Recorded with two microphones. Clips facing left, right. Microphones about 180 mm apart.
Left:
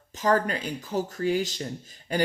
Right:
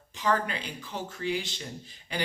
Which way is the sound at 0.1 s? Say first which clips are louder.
Left 4 dB; 45° left (ahead or behind).